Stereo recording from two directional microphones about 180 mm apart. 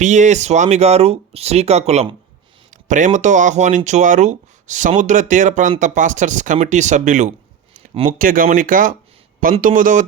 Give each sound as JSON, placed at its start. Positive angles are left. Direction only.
{"t": 0.0, "sound": "speech", "side_deg": -40}